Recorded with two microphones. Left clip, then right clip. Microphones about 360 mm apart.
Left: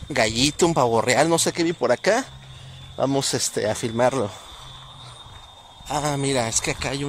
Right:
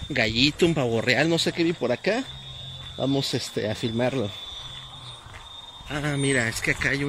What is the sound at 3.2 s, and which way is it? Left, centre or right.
Speech, left.